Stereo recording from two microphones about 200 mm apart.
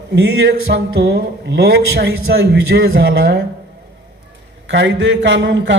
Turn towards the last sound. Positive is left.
turn(degrees=-60)  # may be behind; listen again after turning